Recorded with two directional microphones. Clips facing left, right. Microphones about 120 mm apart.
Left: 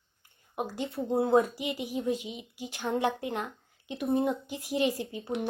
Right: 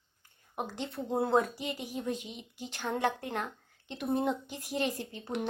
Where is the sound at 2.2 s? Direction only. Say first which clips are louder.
Left 4 dB; 55° left (ahead or behind).